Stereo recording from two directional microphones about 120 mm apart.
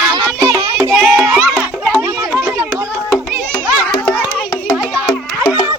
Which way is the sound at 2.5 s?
20° right (ahead or behind).